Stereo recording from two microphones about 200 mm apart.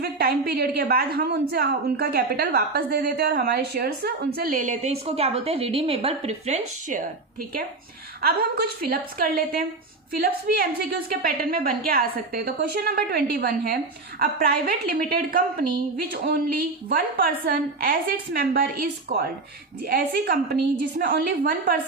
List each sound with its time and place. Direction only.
0.0 s a woman's voice: 50° right (ahead or behind)
8.2 s a woman's voice: 50° right (ahead or behind)